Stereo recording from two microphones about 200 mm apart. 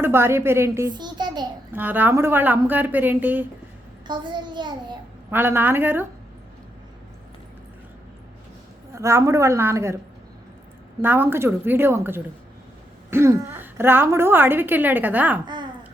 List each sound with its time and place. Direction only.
0.0 s a woman's voice: 10° right (ahead or behind)
1.7 s a woman's voice: 10° right (ahead or behind)
4.0 s a child's voice: 20° right (ahead or behind)
5.3 s a woman's voice: 10° right (ahead or behind)
9.0 s a woman's voice: 15° right (ahead or behind)
11.0 s a woman's voice: 10° right (ahead or behind)